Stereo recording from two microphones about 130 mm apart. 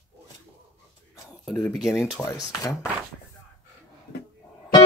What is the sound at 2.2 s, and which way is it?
Speech, 25° left (ahead or behind).